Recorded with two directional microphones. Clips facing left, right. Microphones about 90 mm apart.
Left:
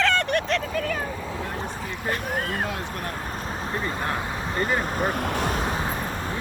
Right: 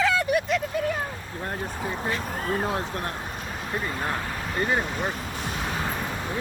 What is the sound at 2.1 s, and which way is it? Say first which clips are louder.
Speech: left 4 dB; 55° left (ahead or behind).